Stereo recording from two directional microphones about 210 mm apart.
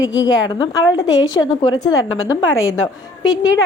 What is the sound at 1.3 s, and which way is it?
Speech, 20° left (ahead or behind).